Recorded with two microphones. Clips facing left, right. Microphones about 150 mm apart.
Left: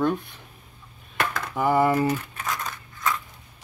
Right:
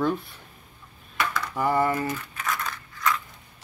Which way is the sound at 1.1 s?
55° left (ahead or behind).